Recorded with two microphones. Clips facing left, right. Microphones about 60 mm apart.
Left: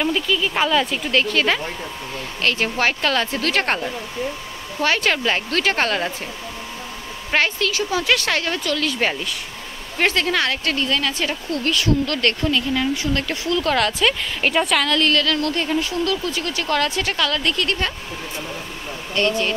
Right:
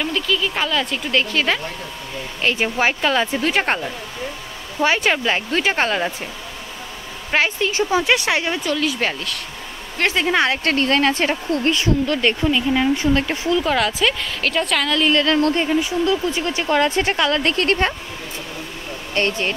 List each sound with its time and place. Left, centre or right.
0.0 s speech: centre
2.4 s speech: centre
7.2 s a woman's voice: centre
7.5 s speech: right; by 9.1 s centre
10.1 s speech: right
10.6 s speech: right
12.1 s speech: centre
13.7 s speech: centre
14.4 s speech: centre
14.7 s speech: centre
15.1 s speech: right
19.1 s speech: right